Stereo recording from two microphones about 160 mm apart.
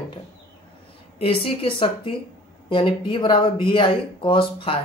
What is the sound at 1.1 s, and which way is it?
Speech, 35° left (ahead or behind).